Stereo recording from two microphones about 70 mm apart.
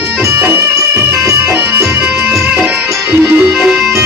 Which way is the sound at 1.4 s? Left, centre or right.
Right.